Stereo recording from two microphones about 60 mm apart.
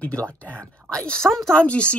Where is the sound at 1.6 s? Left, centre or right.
Centre.